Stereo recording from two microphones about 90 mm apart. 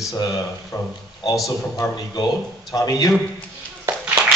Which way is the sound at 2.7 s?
40° left (ahead or behind).